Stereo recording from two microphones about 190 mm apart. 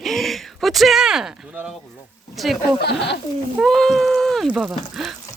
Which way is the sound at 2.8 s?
60° left (ahead or behind).